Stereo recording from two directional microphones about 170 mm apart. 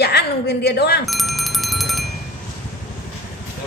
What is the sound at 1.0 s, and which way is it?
Bicycle bell, centre (ahead or behind).